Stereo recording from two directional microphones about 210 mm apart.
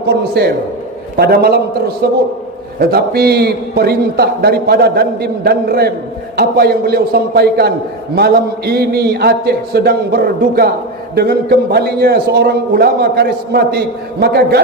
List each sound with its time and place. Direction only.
0.1 s a man's voice: 50° right (ahead or behind)
2.7 s a man's voice: 50° right (ahead or behind)